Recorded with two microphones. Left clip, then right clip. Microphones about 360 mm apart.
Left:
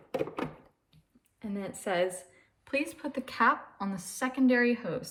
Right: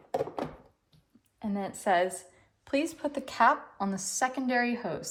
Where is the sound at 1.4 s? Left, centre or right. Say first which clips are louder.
Right 4 dB; centre.